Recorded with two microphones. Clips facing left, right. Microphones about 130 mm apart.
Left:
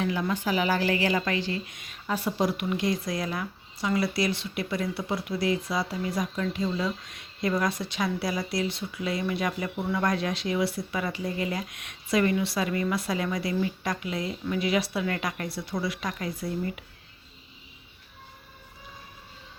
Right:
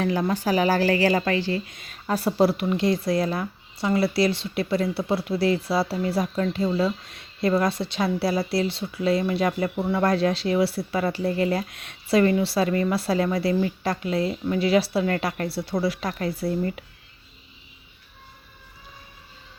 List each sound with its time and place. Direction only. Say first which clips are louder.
0.0 s a woman's voice: right 4 dB; 40° right (ahead or behind)
11.2 s speech: right 7 dB; 60° right (ahead or behind)
11.7 s a woman's voice: right 5 dB; 30° right (ahead or behind)
12.6 s speech: right 5 dB; 45° right (ahead or behind)
12.9 s a woman's voice: right 5 dB; 30° right (ahead or behind)
13.5 s speech: right 5 dB; 45° right (ahead or behind)
13.8 s a woman's voice: right 6 dB; 30° right (ahead or behind)